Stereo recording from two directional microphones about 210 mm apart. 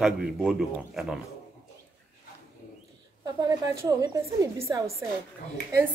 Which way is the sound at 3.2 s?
15° right (ahead or behind).